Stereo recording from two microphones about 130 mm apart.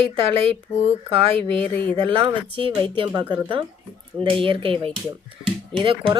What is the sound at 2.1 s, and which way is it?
A woman's voice, 45° right (ahead or behind).